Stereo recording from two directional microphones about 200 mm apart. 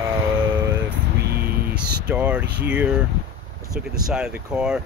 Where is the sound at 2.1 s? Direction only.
10° right (ahead or behind).